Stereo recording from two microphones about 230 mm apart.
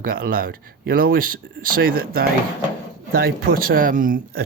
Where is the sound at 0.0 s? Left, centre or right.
Right.